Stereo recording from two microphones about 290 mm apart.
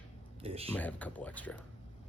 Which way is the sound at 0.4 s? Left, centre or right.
Centre.